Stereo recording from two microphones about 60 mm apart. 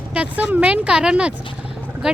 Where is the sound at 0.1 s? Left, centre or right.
Centre.